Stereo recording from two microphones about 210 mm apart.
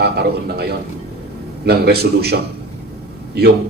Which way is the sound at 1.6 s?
50° right (ahead or behind).